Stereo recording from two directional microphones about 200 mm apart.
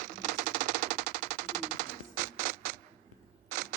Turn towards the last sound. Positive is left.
turn(degrees=-40)  # may be behind; listen again after turning